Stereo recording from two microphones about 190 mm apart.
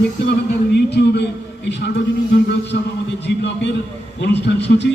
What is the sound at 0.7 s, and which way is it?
A man's voice, 60° left (ahead or behind).